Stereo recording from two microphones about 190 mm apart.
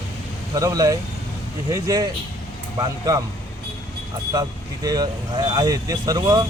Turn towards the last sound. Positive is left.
turn(degrees=-20)  # may be behind; listen again after turning